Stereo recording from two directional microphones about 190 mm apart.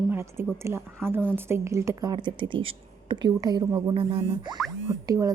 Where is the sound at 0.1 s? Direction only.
15° right (ahead or behind).